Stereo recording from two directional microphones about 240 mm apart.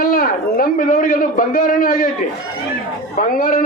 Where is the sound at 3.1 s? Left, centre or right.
Left.